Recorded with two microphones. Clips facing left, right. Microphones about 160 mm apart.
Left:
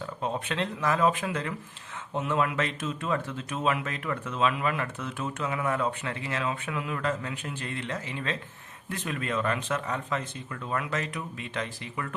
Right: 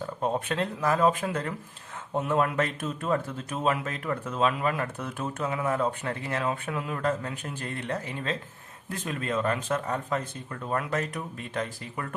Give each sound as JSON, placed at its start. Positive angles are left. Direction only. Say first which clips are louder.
{"t": 0.2, "sound": "speech", "louder": "right 3 dB", "side_deg": -45}
{"t": 0.8, "sound": "speech", "louder": "right 1 dB", "side_deg": -30}
{"t": 2.1, "sound": "a man's voice", "louder": "right 2 dB", "side_deg": -40}
{"t": 3.0, "sound": "speech", "louder": "right 4 dB", "side_deg": -40}
{"t": 6.1, "sound": "a man's voice", "louder": "right 2 dB", "side_deg": -45}
{"t": 8.0, "sound": "speech", "louder": "right 1 dB", "side_deg": -40}
{"t": 10.9, "sound": "a man's voice", "louder": "right 2 dB", "side_deg": -45}